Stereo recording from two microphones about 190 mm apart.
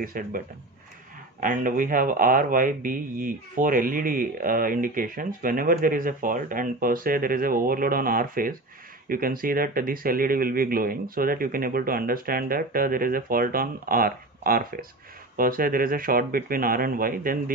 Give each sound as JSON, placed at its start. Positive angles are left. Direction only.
{"t": 0.0, "sound": "a man's voice", "side_deg": -45}
{"t": 1.4, "sound": "a man's voice", "side_deg": -45}